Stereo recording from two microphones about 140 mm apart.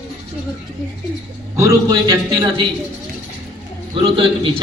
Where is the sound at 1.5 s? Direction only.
25° right (ahead or behind).